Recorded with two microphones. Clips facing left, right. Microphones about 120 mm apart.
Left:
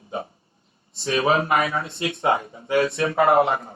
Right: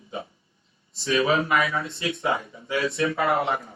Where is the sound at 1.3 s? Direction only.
30° left (ahead or behind).